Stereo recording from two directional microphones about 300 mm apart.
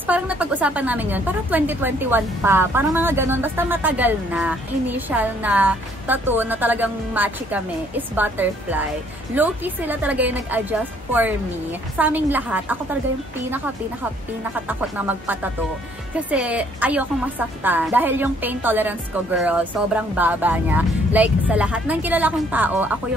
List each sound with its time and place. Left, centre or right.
0.0 s a woman's voice: centre
14.7 s a woman's voice: centre